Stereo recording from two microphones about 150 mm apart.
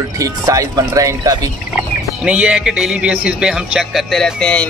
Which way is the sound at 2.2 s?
5° right (ahead or behind).